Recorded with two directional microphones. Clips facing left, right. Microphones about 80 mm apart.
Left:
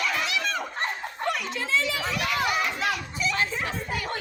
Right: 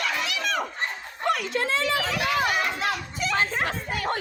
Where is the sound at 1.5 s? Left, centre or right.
Right.